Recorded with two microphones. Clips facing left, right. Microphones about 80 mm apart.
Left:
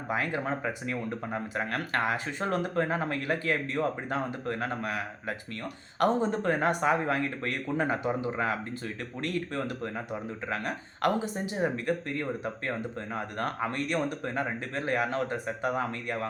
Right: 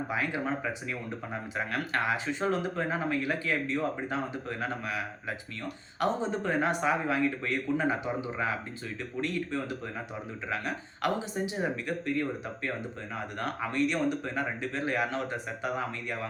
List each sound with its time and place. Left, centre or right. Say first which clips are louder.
0.1 s speech: left 4 dB; left
6.0 s speech: left 3 dB; left
13.3 s speech: even; left